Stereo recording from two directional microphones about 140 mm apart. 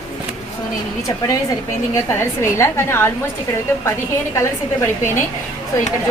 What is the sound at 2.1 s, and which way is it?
A woman's voice, 20° left (ahead or behind).